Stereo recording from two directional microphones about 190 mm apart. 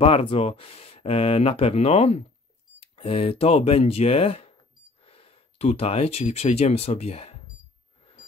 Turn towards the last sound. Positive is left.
turn(degrees=30)  # may be behind; listen again after turning